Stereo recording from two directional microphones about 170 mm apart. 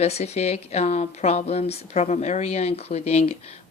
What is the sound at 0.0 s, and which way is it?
Speech, 40° left (ahead or behind).